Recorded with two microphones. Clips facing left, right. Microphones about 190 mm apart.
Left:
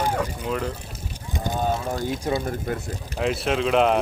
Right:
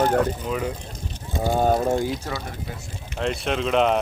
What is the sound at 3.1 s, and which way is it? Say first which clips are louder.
Speech: left 1 dB; 5° left (ahead or behind).